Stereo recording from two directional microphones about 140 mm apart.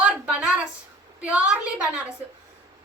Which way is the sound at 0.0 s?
10° right (ahead or behind).